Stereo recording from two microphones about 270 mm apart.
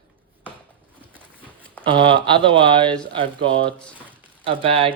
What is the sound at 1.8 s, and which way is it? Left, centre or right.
Speech, centre.